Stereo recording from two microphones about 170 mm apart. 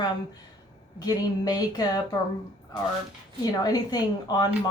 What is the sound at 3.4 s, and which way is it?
Speech, 20° left (ahead or behind).